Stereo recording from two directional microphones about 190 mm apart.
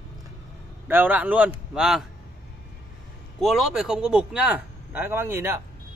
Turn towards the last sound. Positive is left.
turn(degrees=-10)  # may be behind; listen again after turning